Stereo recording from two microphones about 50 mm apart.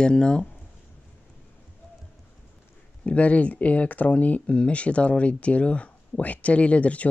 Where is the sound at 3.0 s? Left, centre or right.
Left.